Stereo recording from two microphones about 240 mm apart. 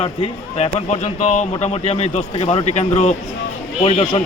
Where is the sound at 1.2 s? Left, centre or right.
Left.